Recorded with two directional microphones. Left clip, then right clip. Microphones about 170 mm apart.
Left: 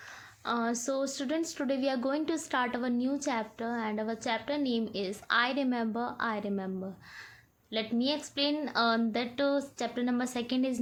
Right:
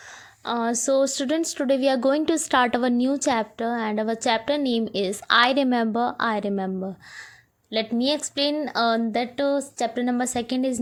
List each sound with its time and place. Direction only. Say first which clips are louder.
0.4 s a woman's voice: right 8 dB; 40° right (ahead or behind)